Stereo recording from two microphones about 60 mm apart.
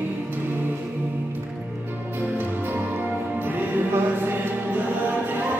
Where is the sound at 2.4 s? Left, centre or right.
Right.